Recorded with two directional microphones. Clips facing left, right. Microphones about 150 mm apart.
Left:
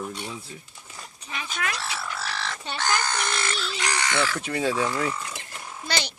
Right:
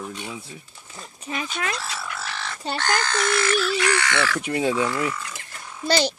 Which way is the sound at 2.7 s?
10° left (ahead or behind).